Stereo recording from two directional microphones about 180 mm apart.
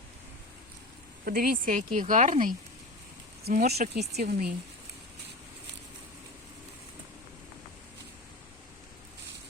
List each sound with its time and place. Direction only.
1.2 s speech: 55° right (ahead or behind)
3.5 s speech: 55° right (ahead or behind)